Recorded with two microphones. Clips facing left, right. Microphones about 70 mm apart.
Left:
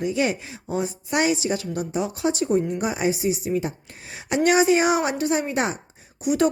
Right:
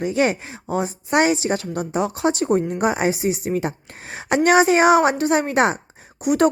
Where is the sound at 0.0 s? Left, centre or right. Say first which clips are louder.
Right 3 dB; right.